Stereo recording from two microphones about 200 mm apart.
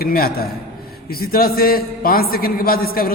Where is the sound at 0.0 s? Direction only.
50° left (ahead or behind).